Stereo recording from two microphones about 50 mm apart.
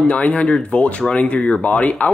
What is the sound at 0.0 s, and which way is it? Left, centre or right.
Speech, left.